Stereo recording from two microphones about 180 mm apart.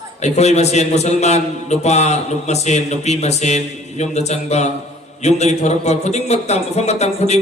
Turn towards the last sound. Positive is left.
turn(degrees=35)  # may be behind; listen again after turning